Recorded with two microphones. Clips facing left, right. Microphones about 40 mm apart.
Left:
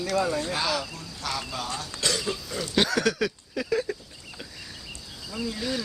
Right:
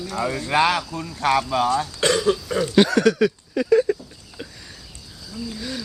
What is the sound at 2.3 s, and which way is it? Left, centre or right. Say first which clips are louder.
Cough: right 11 dB; right.